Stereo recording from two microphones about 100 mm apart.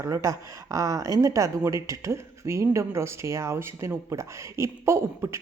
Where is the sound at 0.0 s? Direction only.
30° right (ahead or behind).